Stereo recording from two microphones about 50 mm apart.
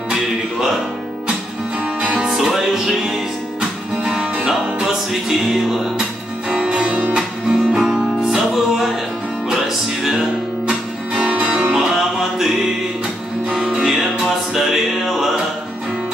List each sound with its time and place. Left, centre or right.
2.0 s music: centre
2.2 s music: centre
10.7 s music: centre
11.7 s music: centre